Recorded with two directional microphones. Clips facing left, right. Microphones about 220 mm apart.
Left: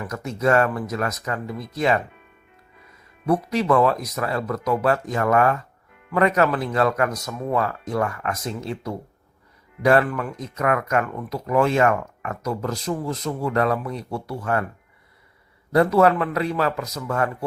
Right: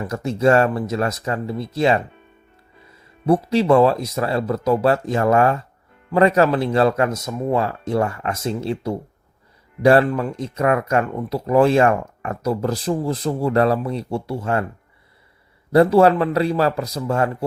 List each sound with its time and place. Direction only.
0.0 s speech: 30° right (ahead or behind)
3.2 s speech: 30° right (ahead or behind)
15.7 s speech: 30° right (ahead or behind)